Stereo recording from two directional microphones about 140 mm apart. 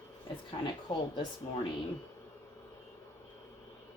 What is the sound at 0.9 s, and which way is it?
Speech, 35° left (ahead or behind).